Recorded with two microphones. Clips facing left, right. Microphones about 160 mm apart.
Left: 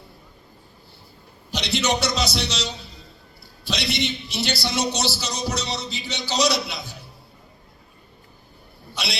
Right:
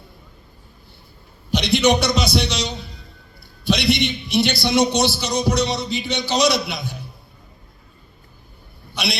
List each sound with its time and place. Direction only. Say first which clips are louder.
1.5 s a man's voice: right 7 dB; 15° right (ahead or behind)